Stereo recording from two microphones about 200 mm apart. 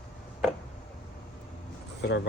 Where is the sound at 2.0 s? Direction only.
55° left (ahead or behind).